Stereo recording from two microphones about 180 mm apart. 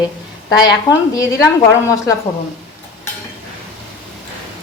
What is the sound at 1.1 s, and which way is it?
Speech, 15° left (ahead or behind).